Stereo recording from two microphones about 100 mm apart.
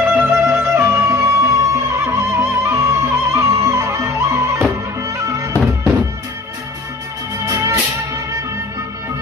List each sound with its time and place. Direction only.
0.1 s music: 20° right (ahead or behind)
7.4 s music: 25° right (ahead or behind)